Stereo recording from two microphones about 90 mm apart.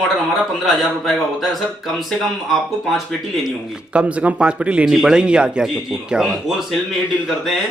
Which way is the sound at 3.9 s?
15° right (ahead or behind).